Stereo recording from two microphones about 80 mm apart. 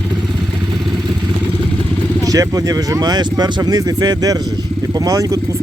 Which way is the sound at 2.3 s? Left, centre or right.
Right.